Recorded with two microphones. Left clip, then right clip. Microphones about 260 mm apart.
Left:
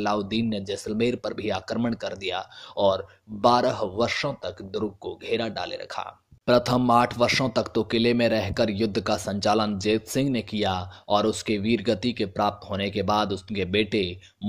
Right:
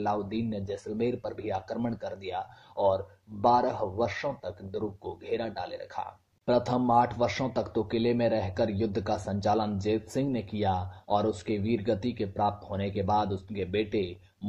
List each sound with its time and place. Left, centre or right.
0.0 s speech: left